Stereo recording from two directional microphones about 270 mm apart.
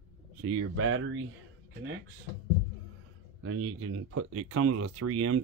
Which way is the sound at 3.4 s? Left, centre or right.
Right.